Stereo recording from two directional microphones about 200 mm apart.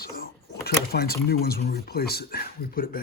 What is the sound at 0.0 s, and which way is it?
Speech, 50° left (ahead or behind).